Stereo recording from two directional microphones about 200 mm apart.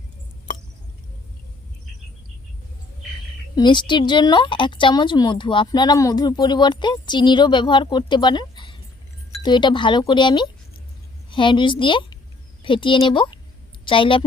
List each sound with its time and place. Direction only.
0.5 s squish: 40° left (ahead or behind)
3.5 s a woman's voice: 20° left (ahead or behind)